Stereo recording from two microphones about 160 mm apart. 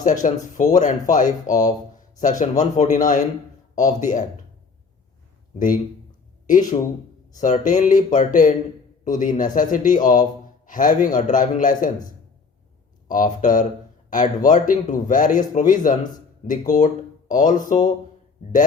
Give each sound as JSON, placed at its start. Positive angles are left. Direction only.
{"t": 0.0, "sound": "speech", "side_deg": 50}
{"t": 5.5, "sound": "a man's voice", "side_deg": 60}
{"t": 13.1, "sound": "a man's voice", "side_deg": 55}